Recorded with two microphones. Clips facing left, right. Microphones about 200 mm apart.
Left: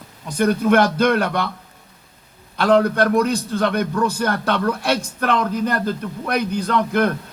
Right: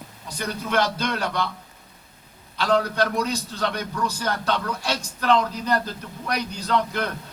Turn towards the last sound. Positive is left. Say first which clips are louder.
# left 6 dB
turn(degrees=55)  # may be behind; listen again after turning